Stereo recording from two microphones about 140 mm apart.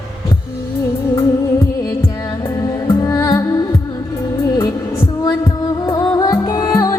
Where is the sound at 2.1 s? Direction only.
25° left (ahead or behind).